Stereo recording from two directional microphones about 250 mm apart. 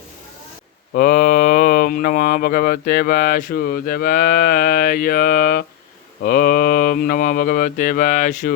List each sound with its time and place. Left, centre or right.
0.9 s speech: left